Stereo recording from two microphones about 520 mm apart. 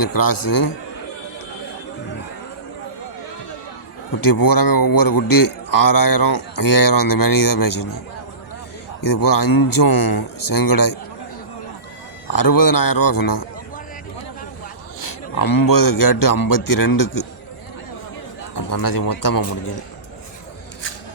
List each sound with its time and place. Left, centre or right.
0.0 s a man's voice: left
4.2 s a man's voice: left
9.0 s a man's voice: left
12.3 s a man's voice: left
15.4 s a man's voice: left
18.5 s a man's voice: left